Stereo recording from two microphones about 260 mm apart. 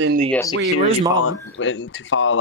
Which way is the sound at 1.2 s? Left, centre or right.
Left.